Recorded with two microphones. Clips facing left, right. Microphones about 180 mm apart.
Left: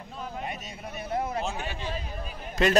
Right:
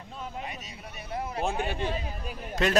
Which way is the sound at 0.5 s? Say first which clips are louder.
Left 4 dB; 50° left (ahead or behind).